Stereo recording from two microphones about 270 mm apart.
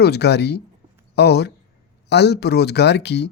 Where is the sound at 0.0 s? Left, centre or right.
Left.